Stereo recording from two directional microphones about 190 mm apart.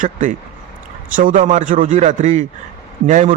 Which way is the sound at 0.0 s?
45° right (ahead or behind).